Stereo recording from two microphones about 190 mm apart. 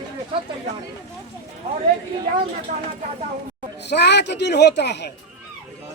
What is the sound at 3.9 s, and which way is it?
A man's voice, 65° left (ahead or behind).